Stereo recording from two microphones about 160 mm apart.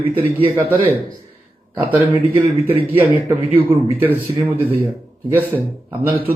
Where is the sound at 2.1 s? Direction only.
10° right (ahead or behind).